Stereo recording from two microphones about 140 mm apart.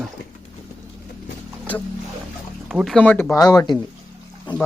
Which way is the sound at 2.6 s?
Centre (ahead or behind).